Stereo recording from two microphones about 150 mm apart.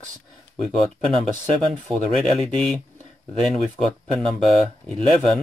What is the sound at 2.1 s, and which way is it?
Speech, 5° left (ahead or behind).